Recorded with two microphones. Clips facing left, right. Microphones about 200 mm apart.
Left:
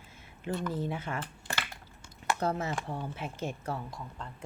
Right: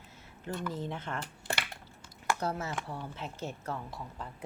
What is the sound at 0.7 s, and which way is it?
Speech, 10° left (ahead or behind).